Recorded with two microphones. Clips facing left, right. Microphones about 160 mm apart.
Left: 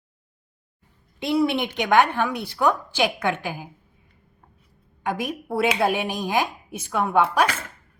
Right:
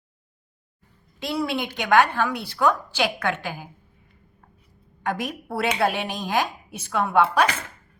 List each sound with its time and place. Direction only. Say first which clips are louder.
1.2 s a woman's voice: left 5 dB; 20° left (ahead or behind)
5.0 s a woman's voice: left 1 dB; 15° left (ahead or behind)